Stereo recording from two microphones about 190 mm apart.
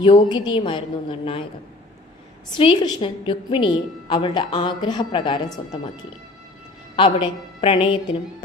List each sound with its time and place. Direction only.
0.0 s a woman's voice: 25° left (ahead or behind)
2.6 s a woman's voice: 25° left (ahead or behind)
6.9 s a woman's voice: 25° left (ahead or behind)